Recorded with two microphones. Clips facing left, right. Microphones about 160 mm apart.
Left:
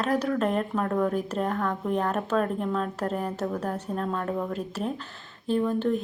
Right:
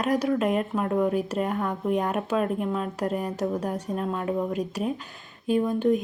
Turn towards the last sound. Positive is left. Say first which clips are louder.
# right 2 dB
turn(degrees=-15)  # may be behind; listen again after turning